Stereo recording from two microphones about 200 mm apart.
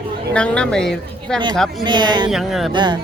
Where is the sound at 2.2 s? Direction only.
Centre (ahead or behind).